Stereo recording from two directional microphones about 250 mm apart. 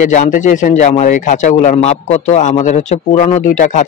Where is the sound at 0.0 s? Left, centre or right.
Left.